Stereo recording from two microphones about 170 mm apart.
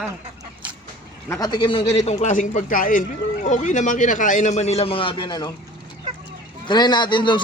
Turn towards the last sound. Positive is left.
turn(degrees=25)  # may be behind; listen again after turning